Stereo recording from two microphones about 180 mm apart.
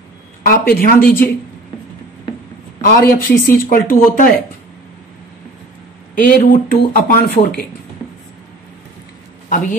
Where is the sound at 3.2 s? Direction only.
55° left (ahead or behind).